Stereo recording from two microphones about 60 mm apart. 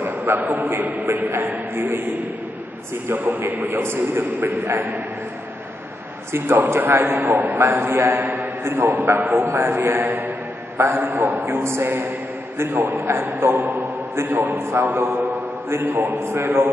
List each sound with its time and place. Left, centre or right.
0.0 s a man's voice: right
3.2 s a man's voice: right
6.3 s a man's voice: right
7.6 s a man's voice: right
8.9 s a man's voice: right